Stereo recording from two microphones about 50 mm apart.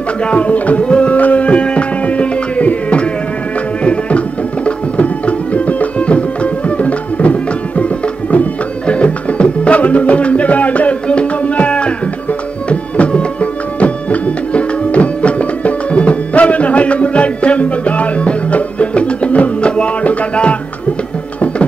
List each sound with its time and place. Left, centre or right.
0.2 s music: left